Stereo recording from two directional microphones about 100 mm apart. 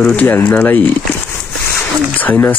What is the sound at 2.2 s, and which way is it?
Speech, 25° left (ahead or behind).